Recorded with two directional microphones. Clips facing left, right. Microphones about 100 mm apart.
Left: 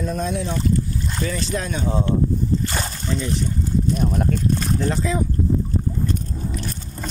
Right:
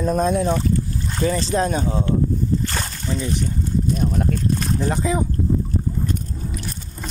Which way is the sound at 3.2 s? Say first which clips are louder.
Right 1 dB; 15° right (ahead or behind).